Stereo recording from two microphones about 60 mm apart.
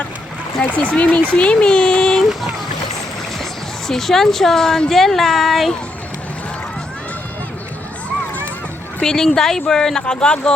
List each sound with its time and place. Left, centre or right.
0.6 s speech: left
3.8 s a woman's voice: centre
9.0 s speech: centre